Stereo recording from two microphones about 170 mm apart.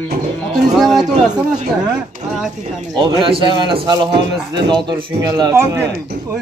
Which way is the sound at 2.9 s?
30° right (ahead or behind).